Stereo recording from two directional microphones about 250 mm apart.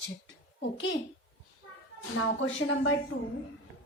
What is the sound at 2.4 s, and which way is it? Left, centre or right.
Speech, left.